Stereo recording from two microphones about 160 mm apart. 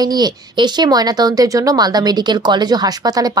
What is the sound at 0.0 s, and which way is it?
Speech, 25° right (ahead or behind).